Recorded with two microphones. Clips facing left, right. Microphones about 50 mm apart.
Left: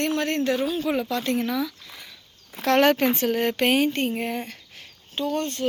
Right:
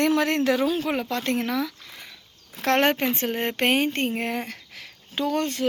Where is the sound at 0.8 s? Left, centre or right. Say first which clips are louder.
Left 1 dB; right.